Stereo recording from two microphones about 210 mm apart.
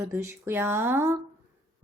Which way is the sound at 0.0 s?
15° right (ahead or behind).